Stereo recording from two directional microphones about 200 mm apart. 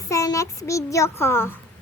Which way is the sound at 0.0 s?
15° left (ahead or behind).